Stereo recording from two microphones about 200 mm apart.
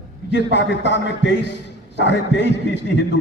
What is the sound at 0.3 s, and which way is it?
A man's voice, 60° left (ahead or behind).